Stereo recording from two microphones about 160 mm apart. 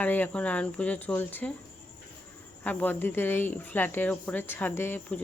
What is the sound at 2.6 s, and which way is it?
Speech, 10° left (ahead or behind).